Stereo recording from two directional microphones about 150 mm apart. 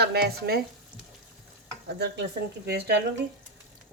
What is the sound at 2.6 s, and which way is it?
Speech, 90° right.